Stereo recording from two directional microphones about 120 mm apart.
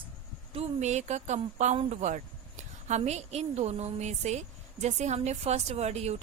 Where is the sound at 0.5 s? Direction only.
65° right (ahead or behind).